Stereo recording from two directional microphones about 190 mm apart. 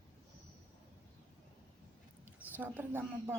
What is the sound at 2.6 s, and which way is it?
Speech, 10° right (ahead or behind).